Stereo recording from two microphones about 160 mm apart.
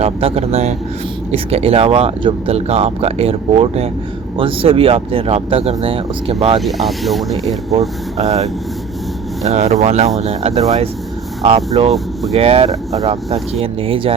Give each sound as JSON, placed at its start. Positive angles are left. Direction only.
{"t": 0.0, "sound": "speech", "side_deg": -35}
{"t": 6.6, "sound": "speech", "side_deg": 0}
{"t": 7.7, "sound": "speech", "side_deg": -40}